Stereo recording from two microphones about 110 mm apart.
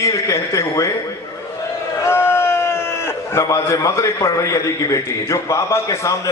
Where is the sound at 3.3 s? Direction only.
30° left (ahead or behind).